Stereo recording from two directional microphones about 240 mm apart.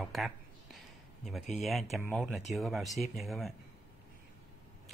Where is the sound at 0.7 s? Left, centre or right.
Centre.